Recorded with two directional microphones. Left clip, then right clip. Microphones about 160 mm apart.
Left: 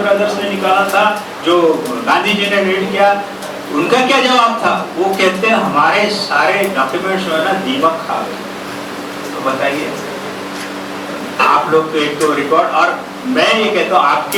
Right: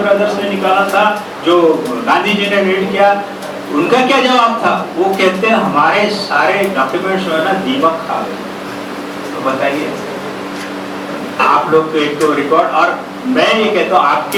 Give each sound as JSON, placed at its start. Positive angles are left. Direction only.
{"t": 0.0, "sound": "a man's voice", "side_deg": -15}
{"t": 9.5, "sound": "a man's voice", "side_deg": -10}
{"t": 11.3, "sound": "a man's voice", "side_deg": -10}